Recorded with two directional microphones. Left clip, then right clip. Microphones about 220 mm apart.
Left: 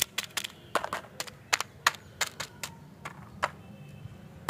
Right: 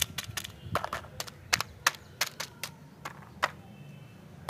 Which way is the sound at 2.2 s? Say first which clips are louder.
Even; 5° left (ahead or behind).